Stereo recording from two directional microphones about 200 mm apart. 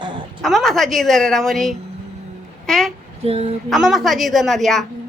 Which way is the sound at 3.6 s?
Centre (ahead or behind).